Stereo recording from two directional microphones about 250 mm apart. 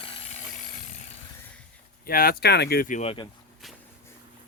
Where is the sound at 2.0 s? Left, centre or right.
Left.